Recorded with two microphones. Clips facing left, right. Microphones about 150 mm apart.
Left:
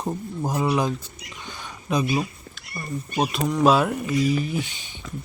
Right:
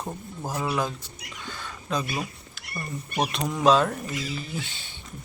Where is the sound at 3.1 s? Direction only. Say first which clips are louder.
Left 5 dB; 5° left (ahead or behind).